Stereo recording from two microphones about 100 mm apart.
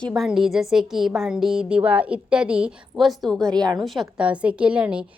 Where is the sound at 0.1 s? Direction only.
5° right (ahead or behind).